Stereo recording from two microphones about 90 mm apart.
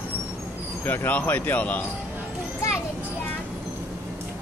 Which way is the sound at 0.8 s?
20° left (ahead or behind).